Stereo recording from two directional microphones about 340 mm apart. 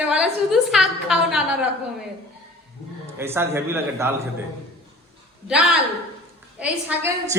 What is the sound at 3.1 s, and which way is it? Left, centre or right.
Speech, centre.